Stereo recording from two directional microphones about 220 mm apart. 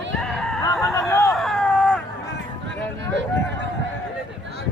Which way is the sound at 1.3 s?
Centre (ahead or behind).